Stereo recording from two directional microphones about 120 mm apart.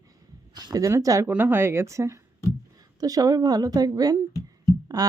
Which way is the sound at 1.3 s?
15° right (ahead or behind).